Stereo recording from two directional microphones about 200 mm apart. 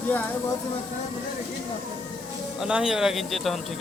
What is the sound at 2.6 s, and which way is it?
Speech, 5° right (ahead or behind).